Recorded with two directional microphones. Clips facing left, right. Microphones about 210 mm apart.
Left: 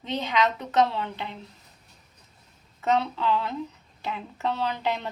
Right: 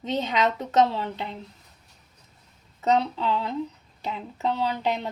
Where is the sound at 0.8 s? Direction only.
25° right (ahead or behind).